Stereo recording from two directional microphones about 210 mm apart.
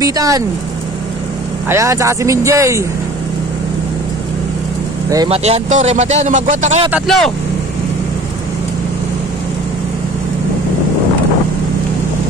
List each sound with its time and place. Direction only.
0.0 s speech: 15° right (ahead or behind)
1.7 s speech: 15° right (ahead or behind)
5.3 s a man's voice: 30° right (ahead or behind)
6.9 s speech: centre (ahead or behind)